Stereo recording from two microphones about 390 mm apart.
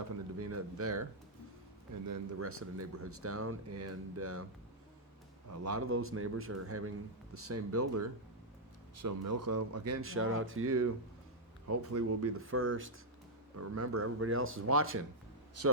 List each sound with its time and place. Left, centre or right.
0.3 s speech: right
2.0 s speech: right
5.6 s speech: right
13.6 s speech: right